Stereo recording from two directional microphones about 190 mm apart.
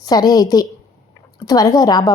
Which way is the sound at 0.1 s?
20° left (ahead or behind).